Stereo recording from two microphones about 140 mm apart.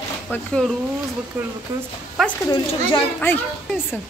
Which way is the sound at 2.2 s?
Centre (ahead or behind).